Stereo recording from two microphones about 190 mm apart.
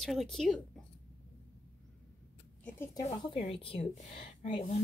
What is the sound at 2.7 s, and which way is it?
Speech, 10° left (ahead or behind).